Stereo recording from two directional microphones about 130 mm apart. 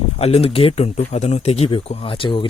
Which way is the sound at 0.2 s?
50° left (ahead or behind).